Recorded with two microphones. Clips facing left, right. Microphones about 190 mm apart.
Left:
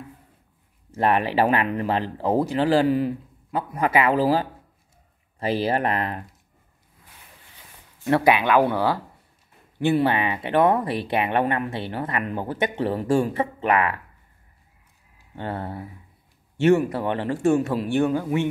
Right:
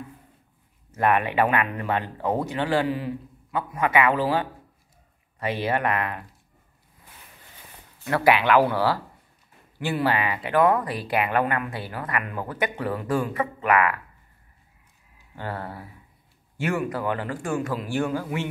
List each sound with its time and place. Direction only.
0.9 s speech: 30° left (ahead or behind)
8.0 s speech: 20° left (ahead or behind)
15.3 s speech: 25° left (ahead or behind)